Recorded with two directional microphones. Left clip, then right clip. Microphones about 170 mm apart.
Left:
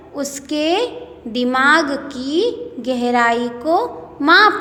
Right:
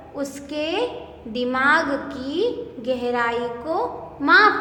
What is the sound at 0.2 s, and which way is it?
A woman's voice, 35° left (ahead or behind).